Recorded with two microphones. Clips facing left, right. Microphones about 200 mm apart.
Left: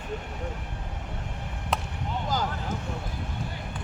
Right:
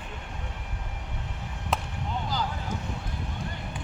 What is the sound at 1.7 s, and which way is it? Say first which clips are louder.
Chop: even; centre (ahead or behind).